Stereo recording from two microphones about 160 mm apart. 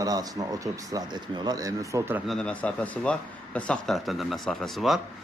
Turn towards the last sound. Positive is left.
turn(degrees=0)  # may be behind; listen again after turning